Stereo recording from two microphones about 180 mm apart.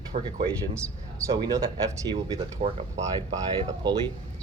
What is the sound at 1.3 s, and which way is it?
Speech, 20° right (ahead or behind).